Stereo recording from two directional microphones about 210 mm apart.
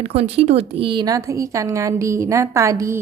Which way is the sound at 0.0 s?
30° right (ahead or behind).